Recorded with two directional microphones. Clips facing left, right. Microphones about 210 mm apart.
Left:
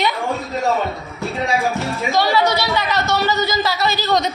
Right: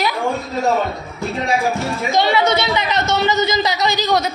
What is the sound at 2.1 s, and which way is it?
Speech, 20° right (ahead or behind).